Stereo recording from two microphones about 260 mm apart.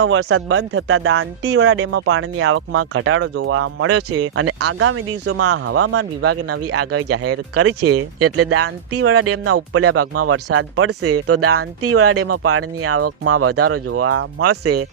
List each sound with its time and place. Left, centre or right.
0.0 s speech: right